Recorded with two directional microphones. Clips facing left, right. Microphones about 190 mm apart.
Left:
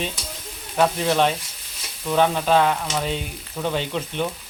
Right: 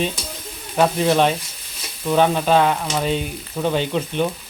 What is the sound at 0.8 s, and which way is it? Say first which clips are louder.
Speech: right 3 dB; 15° right (ahead or behind).